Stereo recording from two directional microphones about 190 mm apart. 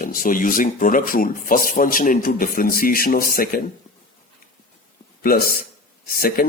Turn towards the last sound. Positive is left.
turn(degrees=50)  # may be behind; listen again after turning